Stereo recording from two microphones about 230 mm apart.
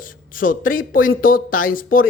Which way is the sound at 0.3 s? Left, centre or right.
Left.